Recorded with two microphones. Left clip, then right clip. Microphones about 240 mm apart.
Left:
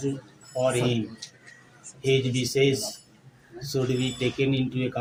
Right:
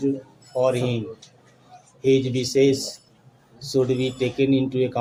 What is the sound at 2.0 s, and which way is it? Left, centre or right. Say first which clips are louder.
Speech: right 5 dB; right.